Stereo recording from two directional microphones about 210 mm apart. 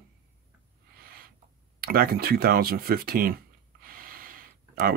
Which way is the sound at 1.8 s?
45° right (ahead or behind).